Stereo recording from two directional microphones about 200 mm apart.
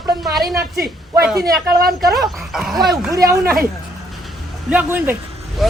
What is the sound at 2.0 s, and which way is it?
A man's voice, centre (ahead or behind).